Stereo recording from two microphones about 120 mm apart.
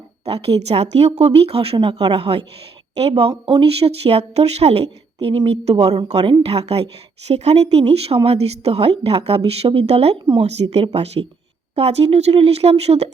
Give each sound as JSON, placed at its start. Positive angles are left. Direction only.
{"t": 0.3, "sound": "a woman's voice", "side_deg": -55}
{"t": 6.2, "sound": "a woman's voice", "side_deg": -55}